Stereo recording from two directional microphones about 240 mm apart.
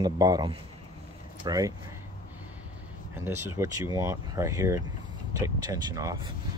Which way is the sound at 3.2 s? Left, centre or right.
Centre.